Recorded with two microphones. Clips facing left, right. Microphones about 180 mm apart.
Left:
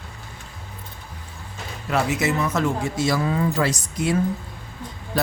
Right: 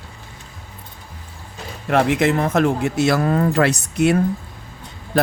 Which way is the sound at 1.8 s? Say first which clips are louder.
Right 6 dB; 55° right (ahead or behind).